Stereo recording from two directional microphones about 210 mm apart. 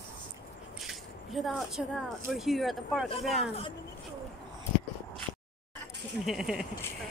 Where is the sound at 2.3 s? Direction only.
Centre (ahead or behind).